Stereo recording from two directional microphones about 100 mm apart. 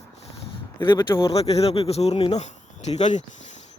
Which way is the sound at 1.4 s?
90° left.